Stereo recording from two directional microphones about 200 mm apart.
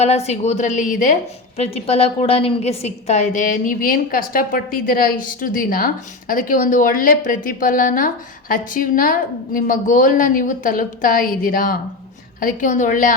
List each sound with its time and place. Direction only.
0.0 s a woman's voice: 30° left (ahead or behind)